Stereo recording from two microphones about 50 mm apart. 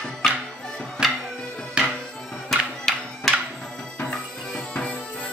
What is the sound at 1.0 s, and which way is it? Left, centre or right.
Music, centre.